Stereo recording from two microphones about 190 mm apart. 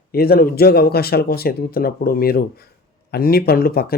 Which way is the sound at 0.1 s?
55° left (ahead or behind).